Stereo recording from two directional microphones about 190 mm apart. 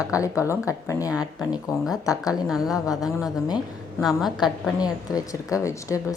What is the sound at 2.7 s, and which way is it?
Speech, 20° left (ahead or behind).